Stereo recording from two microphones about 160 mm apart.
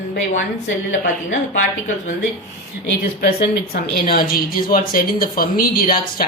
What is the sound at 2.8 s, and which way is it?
A woman's voice, 75° left (ahead or behind).